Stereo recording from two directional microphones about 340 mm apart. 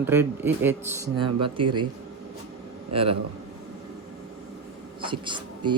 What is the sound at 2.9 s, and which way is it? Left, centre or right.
Speech, centre.